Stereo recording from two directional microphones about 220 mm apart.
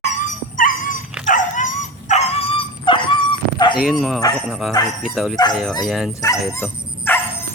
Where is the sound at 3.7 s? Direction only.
Centre (ahead or behind).